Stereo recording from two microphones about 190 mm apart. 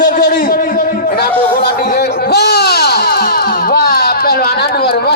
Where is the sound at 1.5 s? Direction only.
55° left (ahead or behind).